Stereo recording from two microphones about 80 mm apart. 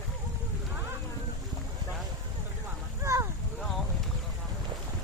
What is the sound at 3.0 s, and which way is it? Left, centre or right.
Boat, right.